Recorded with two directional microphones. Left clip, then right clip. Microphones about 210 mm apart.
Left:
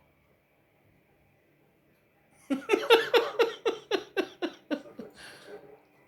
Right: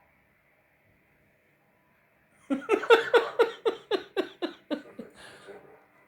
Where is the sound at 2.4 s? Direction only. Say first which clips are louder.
Right 2 dB; 25° right (ahead or behind).